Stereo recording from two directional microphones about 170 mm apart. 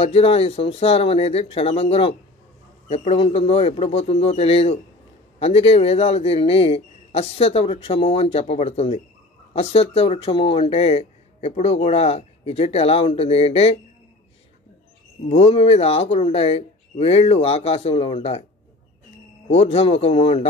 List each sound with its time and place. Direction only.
0.0 s speech: 35° left (ahead or behind)
15.2 s speech: 35° left (ahead or behind)
19.5 s speech: 35° left (ahead or behind)